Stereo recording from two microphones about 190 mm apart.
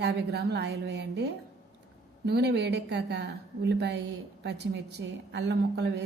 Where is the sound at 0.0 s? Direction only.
65° right (ahead or behind).